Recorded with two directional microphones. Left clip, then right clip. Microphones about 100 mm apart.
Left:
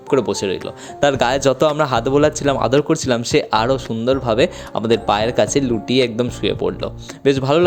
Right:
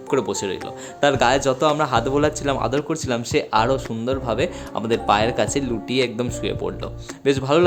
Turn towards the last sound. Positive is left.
turn(degrees=40)  # may be behind; listen again after turning